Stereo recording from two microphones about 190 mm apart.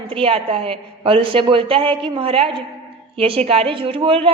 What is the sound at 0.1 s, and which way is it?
A woman's voice, 30° right (ahead or behind).